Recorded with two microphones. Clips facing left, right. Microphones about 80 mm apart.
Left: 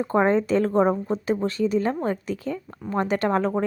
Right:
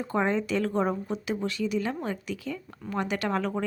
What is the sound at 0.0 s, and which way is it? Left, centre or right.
A woman's voice, left.